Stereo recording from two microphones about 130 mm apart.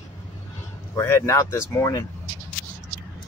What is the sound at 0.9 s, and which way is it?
Speech, 20° left (ahead or behind).